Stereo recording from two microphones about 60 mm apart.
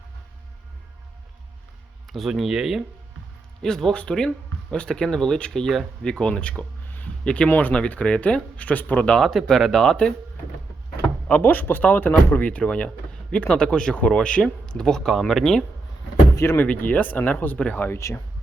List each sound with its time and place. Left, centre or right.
2.1 s speech: centre
3.6 s speech: centre
6.8 s a sound: left
7.3 s speech: centre
9.1 s speech: centre
11.3 s speech: left; by 15.6 s centre
16.3 s speech: left
16.6 s speech: left
17.8 s speech: left